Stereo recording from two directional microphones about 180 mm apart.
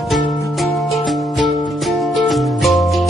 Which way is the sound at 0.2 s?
20° left (ahead or behind).